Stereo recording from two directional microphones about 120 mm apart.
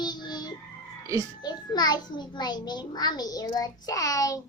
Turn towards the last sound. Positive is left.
turn(degrees=30)  # may be behind; listen again after turning